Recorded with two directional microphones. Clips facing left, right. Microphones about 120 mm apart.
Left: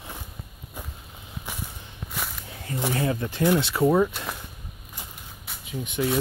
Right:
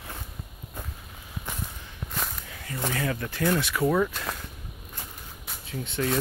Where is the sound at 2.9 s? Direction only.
25° left (ahead or behind).